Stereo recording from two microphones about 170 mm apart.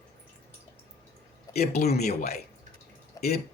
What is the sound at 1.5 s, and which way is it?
Speech, 65° left (ahead or behind).